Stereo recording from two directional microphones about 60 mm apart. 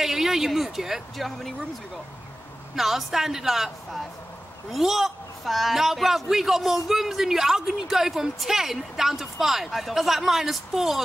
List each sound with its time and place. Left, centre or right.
0.0 s speech: centre
2.7 s a man's voice: centre